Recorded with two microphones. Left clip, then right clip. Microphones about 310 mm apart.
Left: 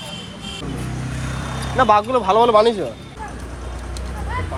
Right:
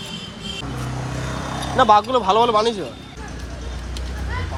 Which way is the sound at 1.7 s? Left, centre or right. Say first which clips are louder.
Even; centre.